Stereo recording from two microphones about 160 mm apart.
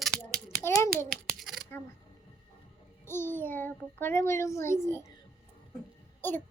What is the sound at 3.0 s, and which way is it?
Child singing, 15° left (ahead or behind).